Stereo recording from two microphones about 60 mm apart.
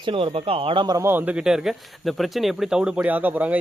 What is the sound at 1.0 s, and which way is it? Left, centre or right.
Speech, right.